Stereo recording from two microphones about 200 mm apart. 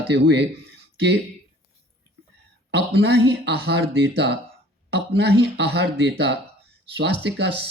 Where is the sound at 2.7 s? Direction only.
55° right (ahead or behind).